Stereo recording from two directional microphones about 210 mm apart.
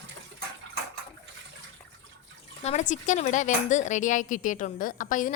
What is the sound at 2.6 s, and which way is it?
A woman's voice, 35° left (ahead or behind).